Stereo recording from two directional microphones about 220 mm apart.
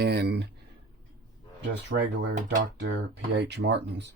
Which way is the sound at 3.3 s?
55° right (ahead or behind).